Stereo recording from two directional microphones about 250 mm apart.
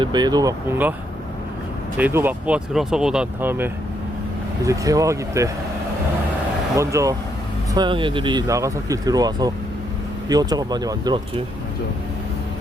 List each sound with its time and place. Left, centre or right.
0.0 s speech: centre
2.0 s speech: centre
6.7 s speech: centre